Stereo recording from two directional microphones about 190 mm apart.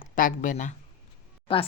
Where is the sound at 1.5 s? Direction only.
25° left (ahead or behind).